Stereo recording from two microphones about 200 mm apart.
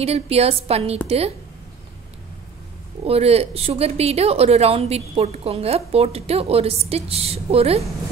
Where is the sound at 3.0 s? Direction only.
30° right (ahead or behind).